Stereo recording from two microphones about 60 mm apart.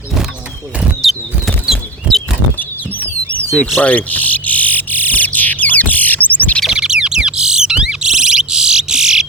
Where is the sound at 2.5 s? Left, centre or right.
Left.